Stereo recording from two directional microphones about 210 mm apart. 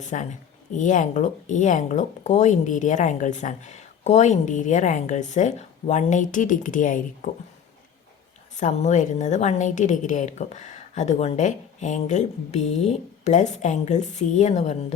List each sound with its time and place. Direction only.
0.0 s speech: 35° left (ahead or behind)
8.5 s speech: 35° left (ahead or behind)